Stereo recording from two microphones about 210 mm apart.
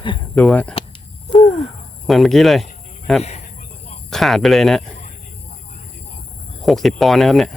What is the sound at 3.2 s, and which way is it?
Speech, 30° left (ahead or behind).